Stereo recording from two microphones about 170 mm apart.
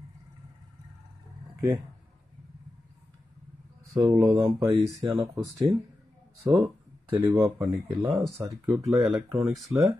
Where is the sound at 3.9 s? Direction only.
15° right (ahead or behind).